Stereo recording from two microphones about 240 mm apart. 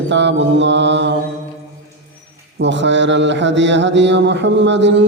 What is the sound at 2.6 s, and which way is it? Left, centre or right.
Mantra, right.